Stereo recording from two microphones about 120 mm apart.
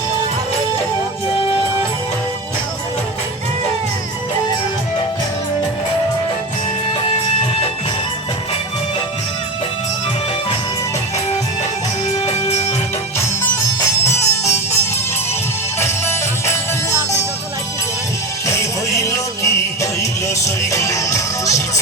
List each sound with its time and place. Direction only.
12.2 s music: 65° left (ahead or behind)
14.0 s music: 20° left (ahead or behind)
18.4 s music: 25° left (ahead or behind)